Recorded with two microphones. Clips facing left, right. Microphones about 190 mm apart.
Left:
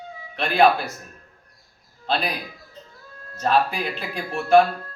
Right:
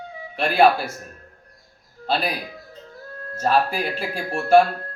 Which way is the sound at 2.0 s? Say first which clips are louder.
Right 1 dB; 10° right (ahead or behind).